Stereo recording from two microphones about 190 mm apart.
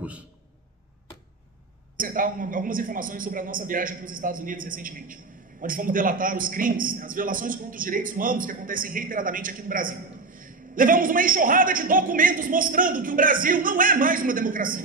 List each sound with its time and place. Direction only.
2.0 s a man's voice: 45° right (ahead or behind)